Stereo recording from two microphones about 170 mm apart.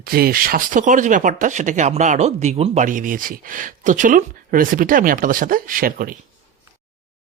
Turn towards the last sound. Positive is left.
turn(degrees=-60)  # may be behind; listen again after turning